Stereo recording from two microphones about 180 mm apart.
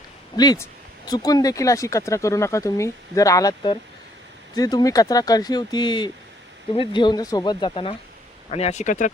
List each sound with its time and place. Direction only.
0.3 s speech: 20° left (ahead or behind); by 9.0 s 45° left (ahead or behind)